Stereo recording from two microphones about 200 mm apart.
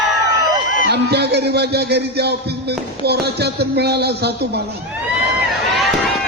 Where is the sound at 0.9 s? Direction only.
55° right (ahead or behind).